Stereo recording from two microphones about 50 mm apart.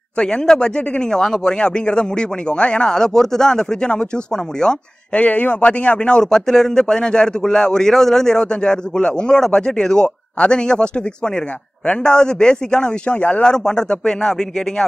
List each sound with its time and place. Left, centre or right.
0.2 s speech: centre
5.1 s speech: left; by 14.3 s centre